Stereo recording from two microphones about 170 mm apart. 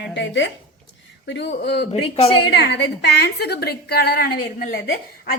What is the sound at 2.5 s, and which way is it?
A woman's voice, 75° left (ahead or behind).